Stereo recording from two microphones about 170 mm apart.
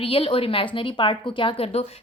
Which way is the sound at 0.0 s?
30° left (ahead or behind).